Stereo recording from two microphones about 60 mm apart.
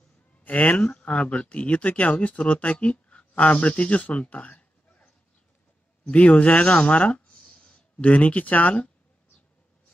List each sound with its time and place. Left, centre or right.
0.4 s speech: left